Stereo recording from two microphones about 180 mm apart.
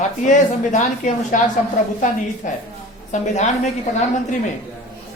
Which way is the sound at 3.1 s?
40° left (ahead or behind).